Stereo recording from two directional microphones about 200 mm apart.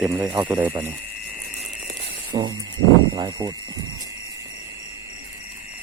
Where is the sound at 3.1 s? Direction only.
20° right (ahead or behind).